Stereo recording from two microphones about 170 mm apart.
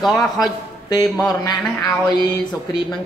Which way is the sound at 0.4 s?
25° left (ahead or behind).